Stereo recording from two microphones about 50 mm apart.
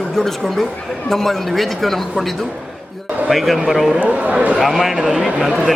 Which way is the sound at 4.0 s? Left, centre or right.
Right.